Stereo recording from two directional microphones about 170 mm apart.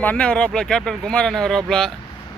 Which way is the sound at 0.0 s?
10° left (ahead or behind).